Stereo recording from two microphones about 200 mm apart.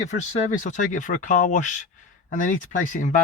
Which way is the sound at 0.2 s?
35° left (ahead or behind).